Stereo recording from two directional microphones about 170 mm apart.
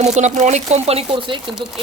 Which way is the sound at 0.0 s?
45° right (ahead or behind).